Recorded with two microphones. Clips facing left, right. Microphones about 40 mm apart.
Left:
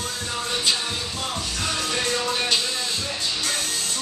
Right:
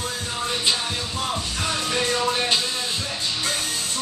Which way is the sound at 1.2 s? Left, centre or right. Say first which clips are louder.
Right 2 dB; centre.